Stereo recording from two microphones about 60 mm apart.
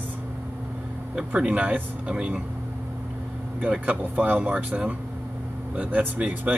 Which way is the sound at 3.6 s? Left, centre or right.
Right.